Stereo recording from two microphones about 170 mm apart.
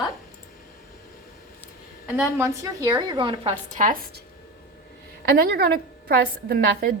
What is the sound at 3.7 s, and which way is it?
Speech, 50° right (ahead or behind).